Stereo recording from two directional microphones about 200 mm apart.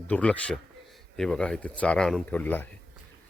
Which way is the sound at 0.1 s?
5° left (ahead or behind).